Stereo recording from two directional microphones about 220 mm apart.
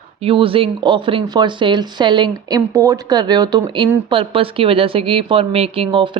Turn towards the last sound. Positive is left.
turn(degrees=-20)  # may be behind; listen again after turning